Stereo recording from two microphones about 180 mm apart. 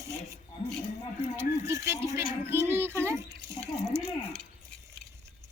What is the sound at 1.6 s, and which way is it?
A child's voice, 15° right (ahead or behind).